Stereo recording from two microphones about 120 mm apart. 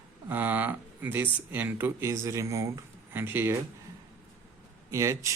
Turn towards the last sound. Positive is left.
turn(degrees=-25)  # may be behind; listen again after turning